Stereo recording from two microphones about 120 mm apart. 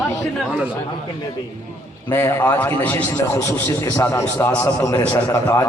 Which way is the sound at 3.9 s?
20° left (ahead or behind).